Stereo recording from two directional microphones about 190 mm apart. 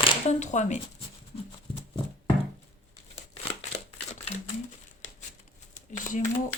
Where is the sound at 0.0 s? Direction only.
35° left (ahead or behind).